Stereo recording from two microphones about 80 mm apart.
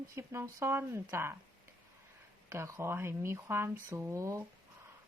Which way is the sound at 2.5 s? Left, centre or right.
Right.